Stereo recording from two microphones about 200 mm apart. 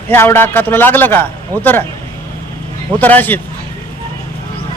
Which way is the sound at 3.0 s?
10° left (ahead or behind).